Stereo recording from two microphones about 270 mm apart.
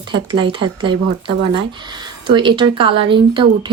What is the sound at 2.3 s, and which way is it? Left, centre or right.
A woman's voice, centre.